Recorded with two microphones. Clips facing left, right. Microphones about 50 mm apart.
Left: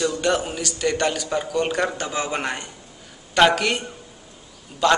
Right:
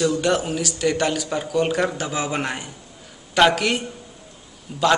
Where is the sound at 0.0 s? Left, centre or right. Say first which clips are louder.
Right 2 dB; centre.